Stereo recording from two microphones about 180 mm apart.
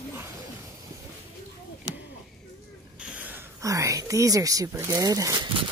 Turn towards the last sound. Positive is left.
turn(degrees=-20)  # may be behind; listen again after turning